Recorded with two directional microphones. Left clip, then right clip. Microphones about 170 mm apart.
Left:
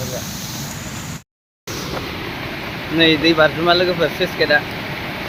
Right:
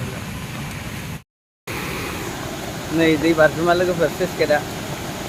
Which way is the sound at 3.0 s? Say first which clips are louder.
Left 2 dB; 5° left (ahead or behind).